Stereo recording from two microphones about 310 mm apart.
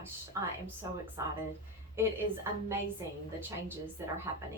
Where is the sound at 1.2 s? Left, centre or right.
Centre.